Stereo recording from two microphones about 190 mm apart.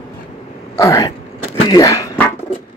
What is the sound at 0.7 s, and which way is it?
Speech, 15° left (ahead or behind).